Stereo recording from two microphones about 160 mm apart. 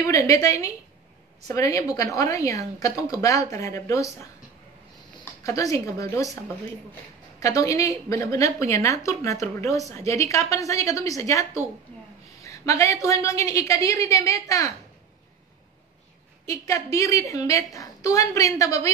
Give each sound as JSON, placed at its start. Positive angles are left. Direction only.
{"t": 0.0, "sound": "a woman's voice", "side_deg": 20}
{"t": 5.4, "sound": "a woman's voice", "side_deg": 20}
{"t": 12.4, "sound": "a woman's voice", "side_deg": 20}
{"t": 16.4, "sound": "a woman's voice", "side_deg": 20}